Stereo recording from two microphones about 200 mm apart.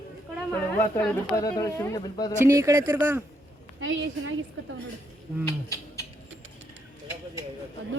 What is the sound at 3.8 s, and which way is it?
Speech, 75° right (ahead or behind).